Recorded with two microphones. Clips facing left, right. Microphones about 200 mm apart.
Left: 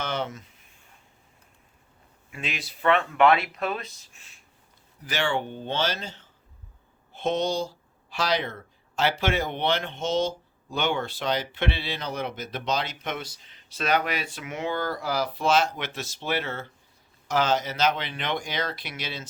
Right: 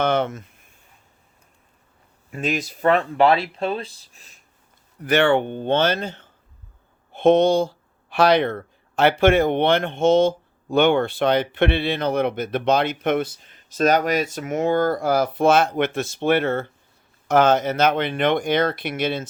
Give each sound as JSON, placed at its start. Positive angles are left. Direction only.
{"t": 0.0, "sound": "a sound", "side_deg": -55}
{"t": 2.3, "sound": "speech", "side_deg": -40}
{"t": 5.0, "sound": "speech", "side_deg": -60}